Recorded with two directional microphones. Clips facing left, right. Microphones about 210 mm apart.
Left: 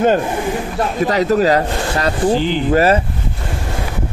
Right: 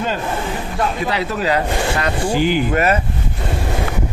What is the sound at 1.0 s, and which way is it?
Speech, 40° left (ahead or behind).